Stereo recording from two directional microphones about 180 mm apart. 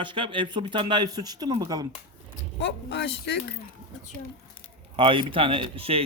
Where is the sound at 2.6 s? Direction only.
75° left (ahead or behind).